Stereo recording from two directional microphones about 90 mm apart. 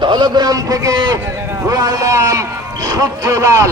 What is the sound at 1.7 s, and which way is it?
A man's voice, 40° right (ahead or behind).